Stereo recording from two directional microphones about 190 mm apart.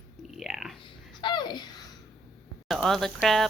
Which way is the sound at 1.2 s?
25° left (ahead or behind).